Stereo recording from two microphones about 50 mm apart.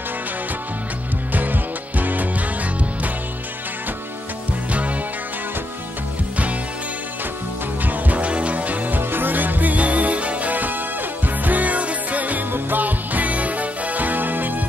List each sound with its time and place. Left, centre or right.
1.3 s music: right
4.6 s music: right
7.8 s music: right